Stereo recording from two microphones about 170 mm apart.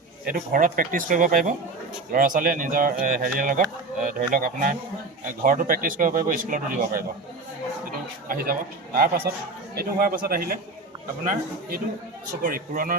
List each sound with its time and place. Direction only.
0.3 s speech: 55° right (ahead or behind)
8.3 s a man's voice: 55° right (ahead or behind)
12.4 s a man's voice: 55° right (ahead or behind)